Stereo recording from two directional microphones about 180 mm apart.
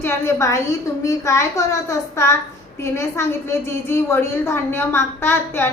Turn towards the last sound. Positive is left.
turn(degrees=15)  # may be behind; listen again after turning